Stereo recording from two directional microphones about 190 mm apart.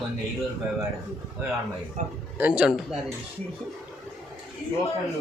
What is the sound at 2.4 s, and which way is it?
Speech, 5° right (ahead or behind).